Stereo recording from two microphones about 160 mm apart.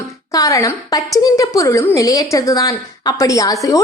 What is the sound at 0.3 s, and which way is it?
A woman's voice, 20° left (ahead or behind).